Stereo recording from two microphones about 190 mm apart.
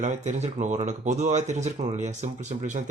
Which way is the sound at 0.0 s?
40° right (ahead or behind).